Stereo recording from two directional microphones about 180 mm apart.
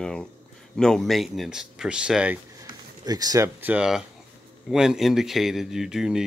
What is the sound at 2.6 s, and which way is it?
Speech, 20° right (ahead or behind).